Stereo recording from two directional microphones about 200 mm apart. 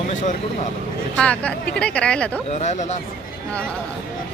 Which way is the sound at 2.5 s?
35° left (ahead or behind).